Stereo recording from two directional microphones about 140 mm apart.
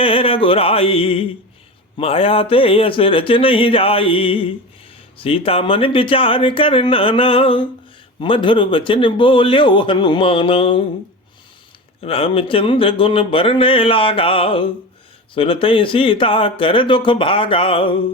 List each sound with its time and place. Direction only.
0.0 s a sound: 40° left (ahead or behind)
2.0 s speech: 45° left (ahead or behind)
12.0 s speech: 45° left (ahead or behind)